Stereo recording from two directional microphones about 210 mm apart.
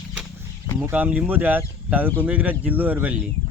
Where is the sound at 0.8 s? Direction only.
10° right (ahead or behind).